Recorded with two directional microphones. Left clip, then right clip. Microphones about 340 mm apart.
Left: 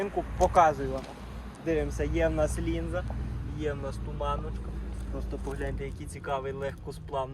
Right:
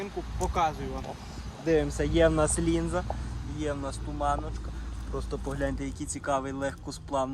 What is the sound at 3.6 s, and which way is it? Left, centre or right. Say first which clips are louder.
Speech: right 1 dB; centre.